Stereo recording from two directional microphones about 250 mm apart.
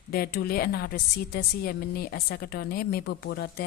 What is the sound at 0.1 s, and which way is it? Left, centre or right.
A woman's voice, left.